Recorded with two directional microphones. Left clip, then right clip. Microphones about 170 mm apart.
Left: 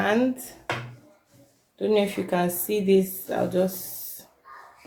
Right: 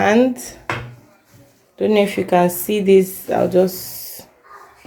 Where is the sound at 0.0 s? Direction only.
40° right (ahead or behind).